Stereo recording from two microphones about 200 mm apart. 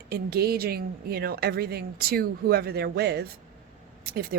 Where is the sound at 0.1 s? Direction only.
50° right (ahead or behind).